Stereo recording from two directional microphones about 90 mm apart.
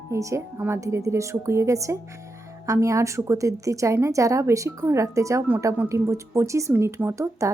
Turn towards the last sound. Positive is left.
turn(degrees=-35)  # may be behind; listen again after turning